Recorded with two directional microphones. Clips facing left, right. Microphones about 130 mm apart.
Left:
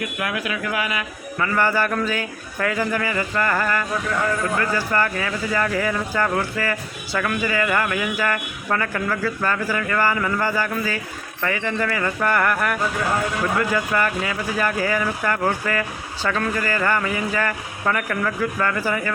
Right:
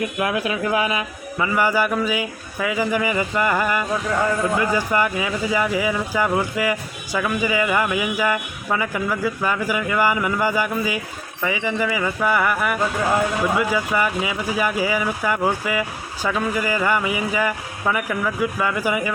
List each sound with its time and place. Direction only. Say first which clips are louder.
0.0 s speech: right 4 dB; 25° right (ahead or behind)
1.4 s speech: right 1 dB; 10° right (ahead or behind)